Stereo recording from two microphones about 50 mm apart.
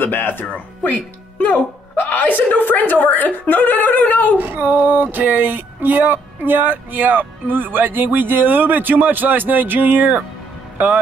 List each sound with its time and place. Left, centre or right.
0.0 s speech: left
0.5 s speech: left
4.4 s speech: right